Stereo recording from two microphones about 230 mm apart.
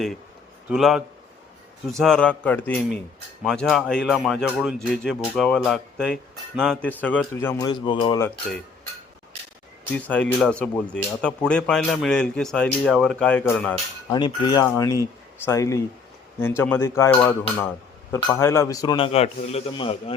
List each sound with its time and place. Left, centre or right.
0.7 s a man's voice: centre
9.9 s speech: centre
14.1 s a man's voice: centre